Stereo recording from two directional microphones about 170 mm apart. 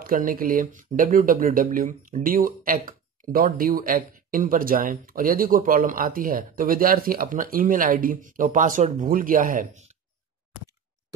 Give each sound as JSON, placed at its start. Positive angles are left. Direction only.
{"t": 0.0, "sound": "speech", "side_deg": -55}